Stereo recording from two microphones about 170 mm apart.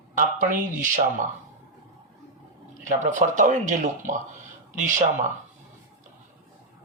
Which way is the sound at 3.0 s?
50° right (ahead or behind).